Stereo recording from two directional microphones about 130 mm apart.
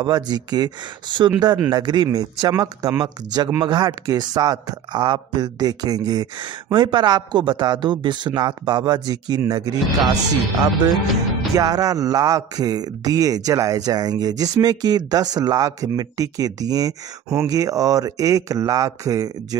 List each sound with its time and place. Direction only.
0.0 s speech: 35° right (ahead or behind)
11.5 s speech: 25° right (ahead or behind)